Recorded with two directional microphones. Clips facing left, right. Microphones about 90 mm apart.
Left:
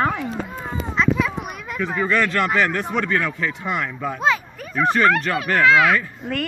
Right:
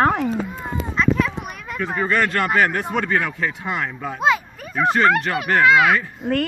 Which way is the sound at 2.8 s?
20° right (ahead or behind).